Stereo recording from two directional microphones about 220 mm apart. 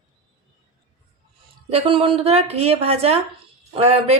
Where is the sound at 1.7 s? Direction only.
25° right (ahead or behind).